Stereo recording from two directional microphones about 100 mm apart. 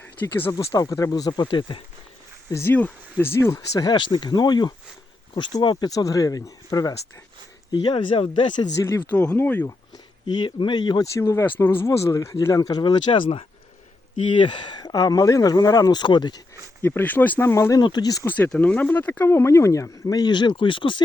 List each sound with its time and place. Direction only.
0.0 s speech: 20° left (ahead or behind)
0.5 s speech: 40° left (ahead or behind)
2.5 s speech: 25° left (ahead or behind)
3.8 s speech: 50° left (ahead or behind)
5.7 s speech: 35° left (ahead or behind)
7.7 s speech: 60° left (ahead or behind)
8.8 s speech: 25° left (ahead or behind)
9.1 s speech: 15° left (ahead or behind)
10.2 s speech: 50° left (ahead or behind)
11.0 s speech: 30° left (ahead or behind); by 16.4 s 50° left (ahead or behind)
16.8 s speech: 20° left (ahead or behind)
17.5 s speech: 30° left (ahead or behind)
17.7 s speech: 45° left (ahead or behind)
18.3 s speech: 15° left (ahead or behind); by 21.0 s 55° left (ahead or behind)